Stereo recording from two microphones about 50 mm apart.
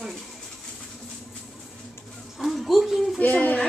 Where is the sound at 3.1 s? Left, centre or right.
Left.